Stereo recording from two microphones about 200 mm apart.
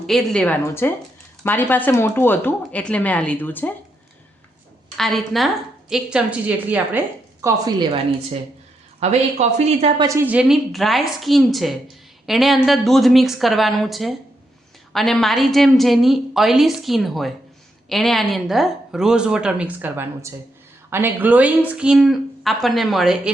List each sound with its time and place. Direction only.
0.1 s speech: centre (ahead or behind)
4.9 s a woman's voice: centre (ahead or behind)
7.4 s a woman's voice: 20° right (ahead or behind)
9.0 s speech: 35° right (ahead or behind)
10.0 s speech: 15° right (ahead or behind)